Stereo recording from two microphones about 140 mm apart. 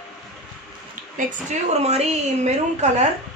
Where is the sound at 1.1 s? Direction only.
55° right (ahead or behind).